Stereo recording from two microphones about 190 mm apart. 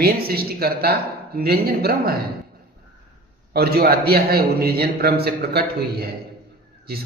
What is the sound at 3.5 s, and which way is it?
A man's voice, 55° right (ahead or behind).